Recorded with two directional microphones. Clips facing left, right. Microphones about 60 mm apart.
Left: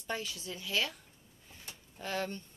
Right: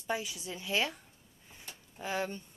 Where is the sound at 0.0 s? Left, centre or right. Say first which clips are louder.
Right 3 dB; centre.